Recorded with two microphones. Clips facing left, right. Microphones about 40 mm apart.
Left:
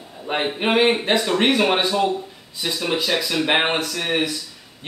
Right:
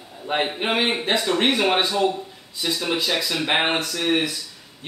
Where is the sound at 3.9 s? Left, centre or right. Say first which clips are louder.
Even; centre.